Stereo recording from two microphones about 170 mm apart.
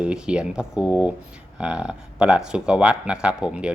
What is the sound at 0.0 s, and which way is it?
Speech, 5° right (ahead or behind).